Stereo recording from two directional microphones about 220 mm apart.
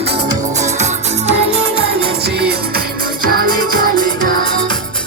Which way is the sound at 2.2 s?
45° right (ahead or behind).